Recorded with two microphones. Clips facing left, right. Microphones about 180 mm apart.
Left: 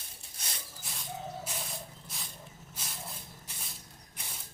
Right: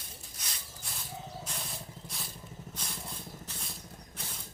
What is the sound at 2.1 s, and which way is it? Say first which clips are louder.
Vehicle: right 2 dB; centre (ahead or behind).